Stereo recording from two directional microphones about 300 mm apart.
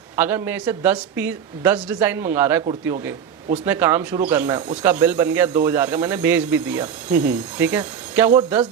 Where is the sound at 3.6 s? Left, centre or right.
Centre.